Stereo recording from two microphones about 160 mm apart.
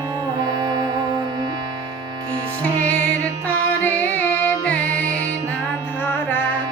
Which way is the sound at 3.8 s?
10° left (ahead or behind).